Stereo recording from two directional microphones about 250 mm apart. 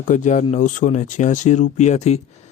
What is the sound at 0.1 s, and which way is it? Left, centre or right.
Speech, left.